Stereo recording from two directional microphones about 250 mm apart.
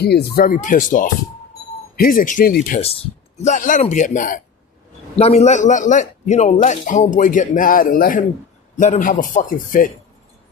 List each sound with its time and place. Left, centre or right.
0.0 s a man's voice: left